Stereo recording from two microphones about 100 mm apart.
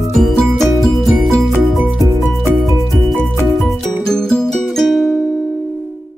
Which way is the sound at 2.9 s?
Centre (ahead or behind).